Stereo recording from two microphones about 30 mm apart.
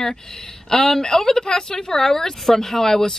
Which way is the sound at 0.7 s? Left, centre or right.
Centre.